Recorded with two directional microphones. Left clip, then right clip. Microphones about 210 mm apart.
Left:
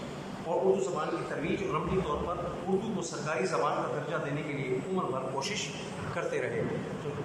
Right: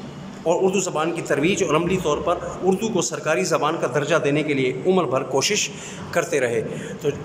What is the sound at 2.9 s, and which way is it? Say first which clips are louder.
A man's voice: right 12 dB; 55° right (ahead or behind).